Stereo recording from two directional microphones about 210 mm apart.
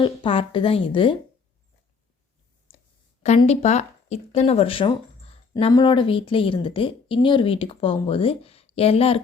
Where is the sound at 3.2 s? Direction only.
35° left (ahead or behind).